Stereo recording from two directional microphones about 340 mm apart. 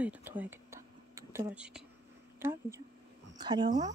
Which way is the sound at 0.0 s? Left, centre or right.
Centre.